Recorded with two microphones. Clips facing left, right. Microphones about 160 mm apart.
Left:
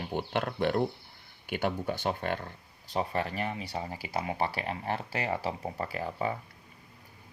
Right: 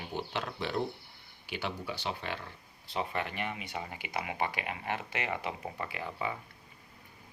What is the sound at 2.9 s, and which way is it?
Speech, 35° left (ahead or behind).